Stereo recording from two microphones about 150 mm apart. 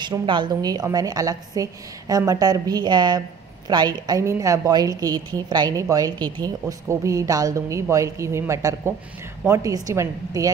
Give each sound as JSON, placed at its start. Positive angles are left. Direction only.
{"t": 0.0, "sound": "a woman's voice", "side_deg": -30}